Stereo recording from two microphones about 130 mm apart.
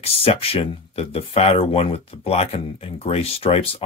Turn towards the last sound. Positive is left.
turn(degrees=45)  # may be behind; listen again after turning